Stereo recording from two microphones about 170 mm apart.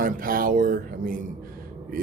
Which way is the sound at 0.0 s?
55° right (ahead or behind).